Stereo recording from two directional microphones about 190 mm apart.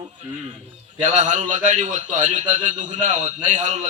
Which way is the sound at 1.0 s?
40° right (ahead or behind).